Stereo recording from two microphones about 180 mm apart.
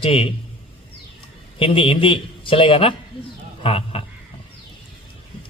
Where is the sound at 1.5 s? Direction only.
30° left (ahead or behind).